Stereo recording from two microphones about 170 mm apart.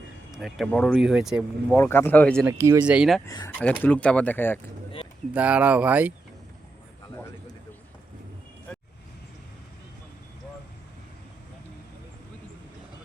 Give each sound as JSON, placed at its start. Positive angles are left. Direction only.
{"t": 0.3, "sound": "speech", "side_deg": 0}
{"t": 1.7, "sound": "speech", "side_deg": 15}
{"t": 2.5, "sound": "speech", "side_deg": -15}
{"t": 3.2, "sound": "speech", "side_deg": 20}
{"t": 3.6, "sound": "speech", "side_deg": 10}
{"t": 5.3, "sound": "speech", "side_deg": -10}